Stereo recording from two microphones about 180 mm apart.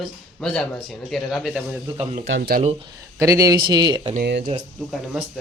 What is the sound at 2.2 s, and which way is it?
Speech, 90° right.